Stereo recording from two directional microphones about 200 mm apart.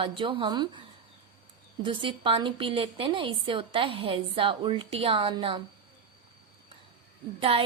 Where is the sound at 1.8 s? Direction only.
25° right (ahead or behind).